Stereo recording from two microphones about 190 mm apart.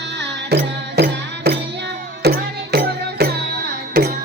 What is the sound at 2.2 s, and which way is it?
Music, 55° right (ahead or behind).